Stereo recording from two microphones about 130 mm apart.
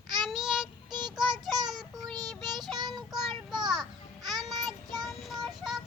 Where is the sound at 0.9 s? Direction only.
35° right (ahead or behind).